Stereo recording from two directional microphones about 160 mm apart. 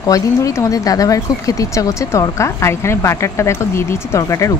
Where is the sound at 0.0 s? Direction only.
20° left (ahead or behind).